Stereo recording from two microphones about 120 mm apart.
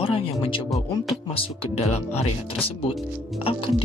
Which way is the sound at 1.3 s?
60° left (ahead or behind).